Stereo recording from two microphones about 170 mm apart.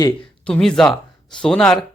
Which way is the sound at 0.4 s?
5° left (ahead or behind).